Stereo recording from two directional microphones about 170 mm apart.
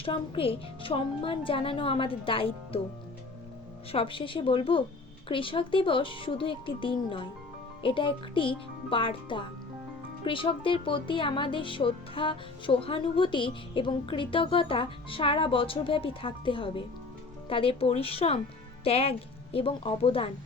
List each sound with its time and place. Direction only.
0.0 s speech: 35° left (ahead or behind)
3.9 s speech: 30° left (ahead or behind)